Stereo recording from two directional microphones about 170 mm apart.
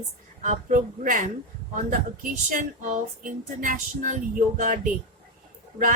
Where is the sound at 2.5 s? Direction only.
50° right (ahead or behind).